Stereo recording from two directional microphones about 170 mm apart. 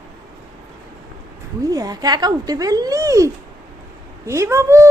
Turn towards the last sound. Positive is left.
turn(degrees=-15)  # may be behind; listen again after turning